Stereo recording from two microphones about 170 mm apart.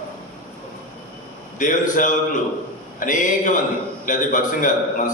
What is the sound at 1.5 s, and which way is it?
A man's voice, 50° left (ahead or behind).